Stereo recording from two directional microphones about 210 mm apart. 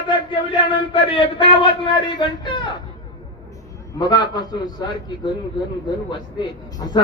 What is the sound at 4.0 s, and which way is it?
A man's voice, 20° left (ahead or behind).